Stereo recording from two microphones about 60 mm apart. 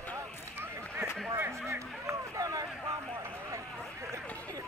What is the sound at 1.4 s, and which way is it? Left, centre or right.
Chatter, right.